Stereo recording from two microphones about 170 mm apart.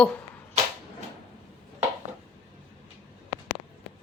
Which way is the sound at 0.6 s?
40° right (ahead or behind).